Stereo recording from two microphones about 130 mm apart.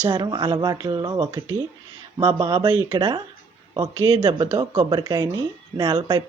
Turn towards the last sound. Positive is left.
turn(degrees=-35)  # may be behind; listen again after turning